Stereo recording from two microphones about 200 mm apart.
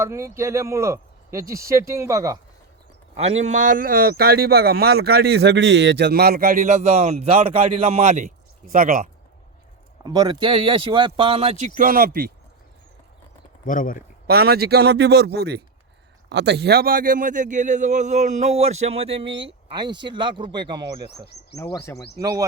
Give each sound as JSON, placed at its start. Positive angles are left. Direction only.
{"t": 0.0, "sound": "speech", "side_deg": -15}
{"t": 3.2, "sound": "speech", "side_deg": -35}
{"t": 10.0, "sound": "speech", "side_deg": -20}
{"t": 13.7, "sound": "speech", "side_deg": 40}
{"t": 14.3, "sound": "speech", "side_deg": -50}
{"t": 21.6, "sound": "speech", "side_deg": 15}
{"t": 22.2, "sound": "speech", "side_deg": -20}